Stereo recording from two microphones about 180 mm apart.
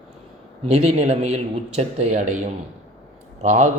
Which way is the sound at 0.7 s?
35° right (ahead or behind).